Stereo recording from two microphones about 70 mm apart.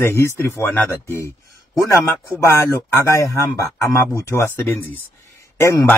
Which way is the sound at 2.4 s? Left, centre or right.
Left.